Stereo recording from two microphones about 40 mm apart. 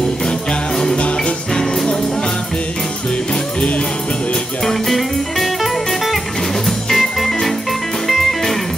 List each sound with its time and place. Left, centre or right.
0.2 s music: centre
0.9 s music: left
4.6 s music: centre